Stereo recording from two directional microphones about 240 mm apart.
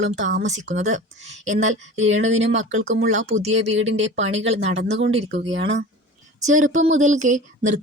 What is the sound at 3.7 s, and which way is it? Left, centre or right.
Speech, right.